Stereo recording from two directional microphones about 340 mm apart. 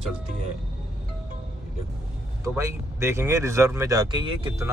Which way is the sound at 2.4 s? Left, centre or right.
Centre.